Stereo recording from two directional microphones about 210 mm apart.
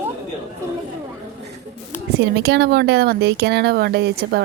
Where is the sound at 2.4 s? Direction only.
50° right (ahead or behind).